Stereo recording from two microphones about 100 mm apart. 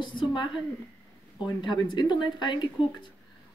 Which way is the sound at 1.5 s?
50° left (ahead or behind).